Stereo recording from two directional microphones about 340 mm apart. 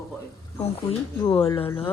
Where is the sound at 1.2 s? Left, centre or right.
Centre.